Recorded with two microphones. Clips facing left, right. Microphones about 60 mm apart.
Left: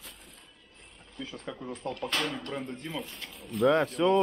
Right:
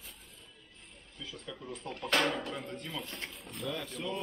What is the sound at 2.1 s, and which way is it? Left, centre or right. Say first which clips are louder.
Speech: right 4 dB; right.